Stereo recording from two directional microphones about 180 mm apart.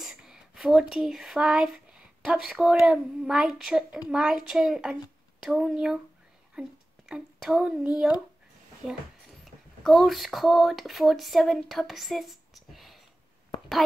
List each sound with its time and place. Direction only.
0.0 s speech: centre (ahead or behind)
7.1 s speech: 5° right (ahead or behind)
9.8 s speech: centre (ahead or behind)